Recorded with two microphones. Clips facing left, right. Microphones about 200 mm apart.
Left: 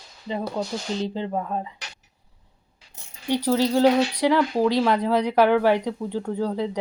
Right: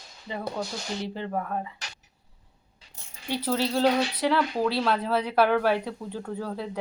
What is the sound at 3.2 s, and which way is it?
Speech, 15° left (ahead or behind).